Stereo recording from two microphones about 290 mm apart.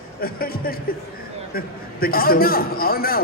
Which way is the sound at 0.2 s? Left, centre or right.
Left.